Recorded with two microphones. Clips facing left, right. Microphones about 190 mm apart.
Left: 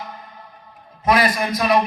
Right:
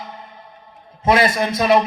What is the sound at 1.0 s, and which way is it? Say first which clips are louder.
Speech: right 2 dB; 25° right (ahead or behind).